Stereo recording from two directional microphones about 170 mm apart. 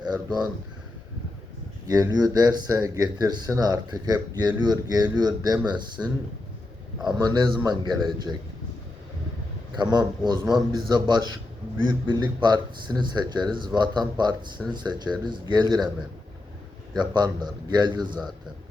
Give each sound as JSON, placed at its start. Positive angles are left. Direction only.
{"t": 0.0, "sound": "speech", "side_deg": -25}
{"t": 1.9, "sound": "speech", "side_deg": -25}
{"t": 6.0, "sound": "speech", "side_deg": -15}
{"t": 7.3, "sound": "speech", "side_deg": -25}
{"t": 9.7, "sound": "speech", "side_deg": -25}
{"t": 16.9, "sound": "speech", "side_deg": -25}